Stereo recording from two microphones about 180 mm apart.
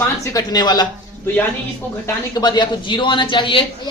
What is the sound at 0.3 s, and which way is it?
Speech, 20° left (ahead or behind).